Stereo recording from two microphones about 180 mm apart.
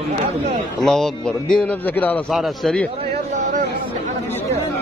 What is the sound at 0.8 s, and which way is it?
A man's voice, centre (ahead or behind).